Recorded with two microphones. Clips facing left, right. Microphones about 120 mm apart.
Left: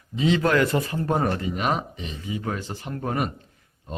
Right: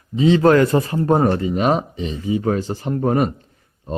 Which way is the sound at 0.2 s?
35° right (ahead or behind).